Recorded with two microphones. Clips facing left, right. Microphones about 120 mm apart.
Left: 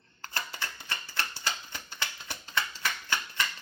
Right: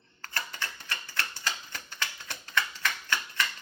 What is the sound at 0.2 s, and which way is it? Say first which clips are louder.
Typewriter: even; 25° left (ahead or behind).